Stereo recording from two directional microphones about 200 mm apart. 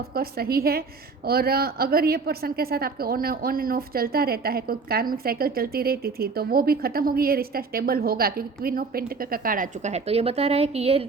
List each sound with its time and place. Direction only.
0.1 s a woman's voice: 50° right (ahead or behind); by 11.0 s 30° right (ahead or behind)